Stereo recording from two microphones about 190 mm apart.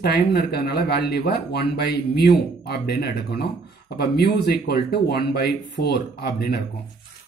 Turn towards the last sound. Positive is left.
turn(degrees=60)  # may be behind; listen again after turning